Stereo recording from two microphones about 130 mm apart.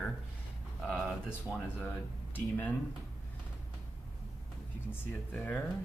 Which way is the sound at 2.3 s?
10° left (ahead or behind).